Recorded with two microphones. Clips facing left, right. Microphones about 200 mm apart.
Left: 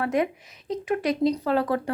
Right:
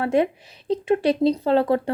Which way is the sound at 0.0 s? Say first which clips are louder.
Right 4 dB; 30° right (ahead or behind).